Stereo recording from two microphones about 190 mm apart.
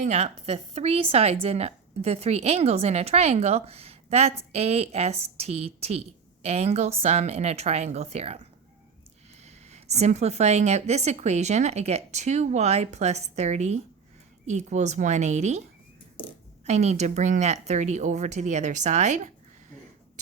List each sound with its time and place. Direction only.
0.0 s speech: 35° right (ahead or behind)
9.4 s speech: 35° right (ahead or behind)
16.6 s speech: 35° right (ahead or behind)